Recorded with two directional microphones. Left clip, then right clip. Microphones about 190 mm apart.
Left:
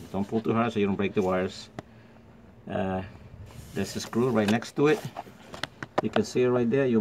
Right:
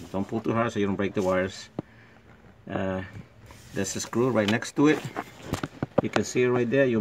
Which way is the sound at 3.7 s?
25° right (ahead or behind).